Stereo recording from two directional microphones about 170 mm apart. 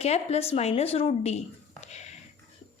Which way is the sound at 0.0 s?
40° left (ahead or behind).